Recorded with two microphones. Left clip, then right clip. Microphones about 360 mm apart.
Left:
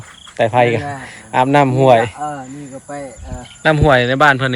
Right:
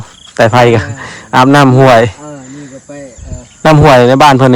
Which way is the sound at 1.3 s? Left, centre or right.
Right.